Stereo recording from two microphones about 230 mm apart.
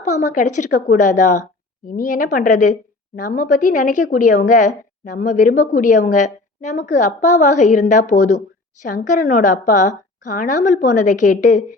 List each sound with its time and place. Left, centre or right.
0.0 s a woman's voice: left